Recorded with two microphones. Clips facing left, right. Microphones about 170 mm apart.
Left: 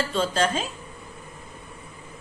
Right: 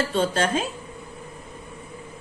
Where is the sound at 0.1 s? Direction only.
55° right (ahead or behind).